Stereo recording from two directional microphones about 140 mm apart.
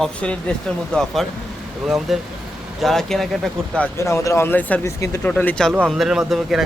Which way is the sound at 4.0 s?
20° left (ahead or behind).